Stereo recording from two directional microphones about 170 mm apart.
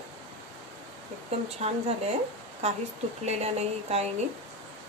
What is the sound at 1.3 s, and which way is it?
Speech, 35° right (ahead or behind).